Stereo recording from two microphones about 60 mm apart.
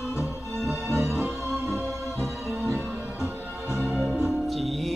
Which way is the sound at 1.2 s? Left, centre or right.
Right.